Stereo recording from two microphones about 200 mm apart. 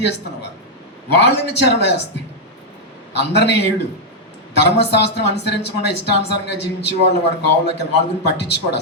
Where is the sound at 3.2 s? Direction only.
55° left (ahead or behind).